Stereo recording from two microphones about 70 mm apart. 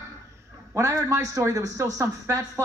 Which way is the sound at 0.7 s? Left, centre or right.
Right.